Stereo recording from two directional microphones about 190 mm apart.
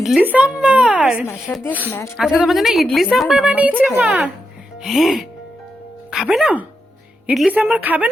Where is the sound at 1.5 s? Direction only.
10° left (ahead or behind).